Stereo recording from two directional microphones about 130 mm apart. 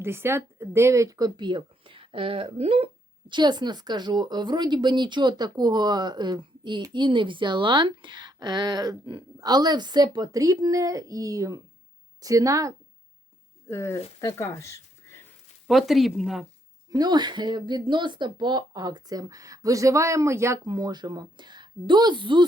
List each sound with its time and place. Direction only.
0.0 s speech: 20° right (ahead or behind)
13.7 s speech: 20° left (ahead or behind)
15.6 s speech: centre (ahead or behind)
16.9 s speech: 30° right (ahead or behind)
20.7 s speech: 35° right (ahead or behind)